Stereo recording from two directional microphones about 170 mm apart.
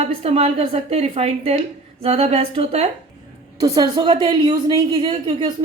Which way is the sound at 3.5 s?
20° right (ahead or behind).